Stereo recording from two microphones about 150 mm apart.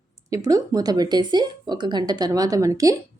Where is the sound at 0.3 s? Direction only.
25° right (ahead or behind).